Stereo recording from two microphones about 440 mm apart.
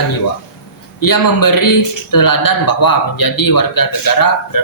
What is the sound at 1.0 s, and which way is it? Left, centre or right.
A man's voice, left.